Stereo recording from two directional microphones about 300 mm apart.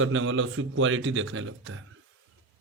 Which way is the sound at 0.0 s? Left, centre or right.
Right.